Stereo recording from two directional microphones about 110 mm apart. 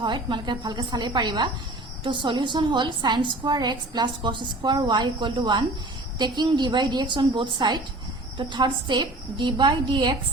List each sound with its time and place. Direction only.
0.0 s a woman's voice: 45° right (ahead or behind)